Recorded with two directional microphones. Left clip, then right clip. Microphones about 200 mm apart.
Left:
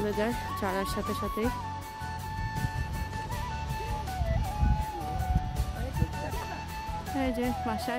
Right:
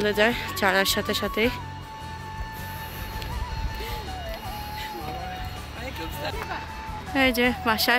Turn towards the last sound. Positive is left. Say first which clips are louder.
# right 9 dB
turn(degrees=-5)  # may be behind; listen again after turning